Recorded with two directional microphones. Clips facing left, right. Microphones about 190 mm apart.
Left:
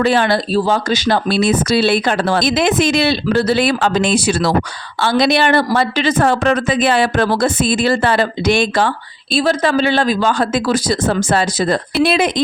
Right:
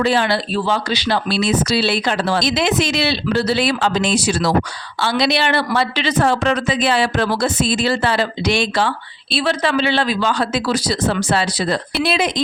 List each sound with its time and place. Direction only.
0.0 s speech: 55° left (ahead or behind)